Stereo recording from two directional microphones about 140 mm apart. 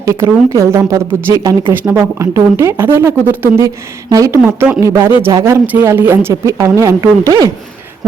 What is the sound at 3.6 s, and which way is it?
A woman's voice, 25° right (ahead or behind).